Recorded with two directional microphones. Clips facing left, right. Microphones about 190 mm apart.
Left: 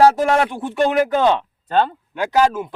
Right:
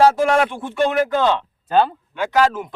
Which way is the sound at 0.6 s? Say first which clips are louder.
Left 1 dB; 15° left (ahead or behind).